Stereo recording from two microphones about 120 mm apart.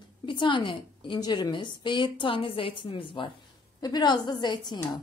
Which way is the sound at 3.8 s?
35° left (ahead or behind).